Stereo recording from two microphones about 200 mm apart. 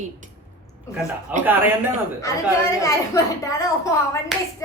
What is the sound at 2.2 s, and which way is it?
A woman's voice, 15° left (ahead or behind).